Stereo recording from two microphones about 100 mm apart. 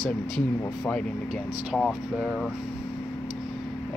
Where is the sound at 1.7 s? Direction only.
5° right (ahead or behind).